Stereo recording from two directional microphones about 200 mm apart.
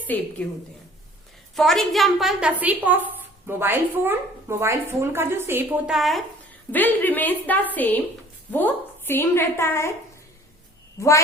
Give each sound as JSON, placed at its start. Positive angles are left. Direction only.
{"t": 0.1, "sound": "a woman's voice", "side_deg": 10}
{"t": 1.5, "sound": "a woman's voice", "side_deg": 0}